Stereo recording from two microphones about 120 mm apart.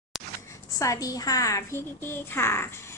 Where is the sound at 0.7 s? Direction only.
30° left (ahead or behind).